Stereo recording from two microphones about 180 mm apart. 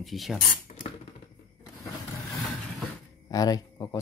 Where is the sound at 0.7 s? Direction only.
40° left (ahead or behind).